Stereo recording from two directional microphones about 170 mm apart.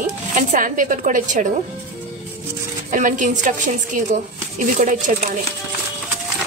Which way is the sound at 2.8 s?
50° right (ahead or behind).